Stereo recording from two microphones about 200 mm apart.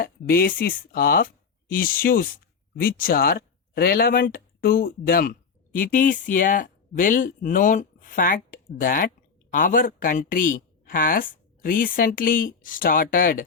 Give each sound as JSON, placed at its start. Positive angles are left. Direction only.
{"t": 0.0, "sound": "speech", "side_deg": 50}